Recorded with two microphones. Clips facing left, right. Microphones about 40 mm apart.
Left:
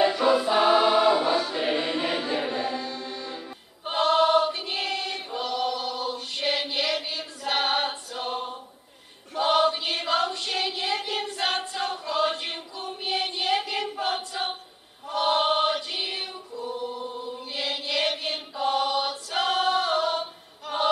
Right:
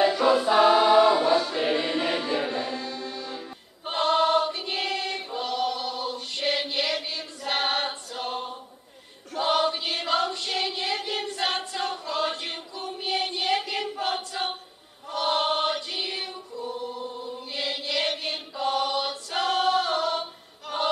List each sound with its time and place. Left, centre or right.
0.0 s choir: centre
2.0 s chant: centre
2.6 s music: centre
3.3 s choir: centre